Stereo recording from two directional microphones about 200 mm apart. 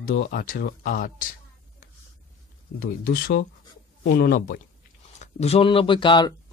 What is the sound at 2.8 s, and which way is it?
Speech, 50° left (ahead or behind).